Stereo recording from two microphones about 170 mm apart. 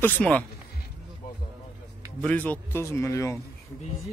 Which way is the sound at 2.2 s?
10° left (ahead or behind).